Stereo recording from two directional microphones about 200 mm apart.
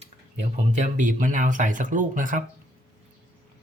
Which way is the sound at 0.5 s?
40° right (ahead or behind).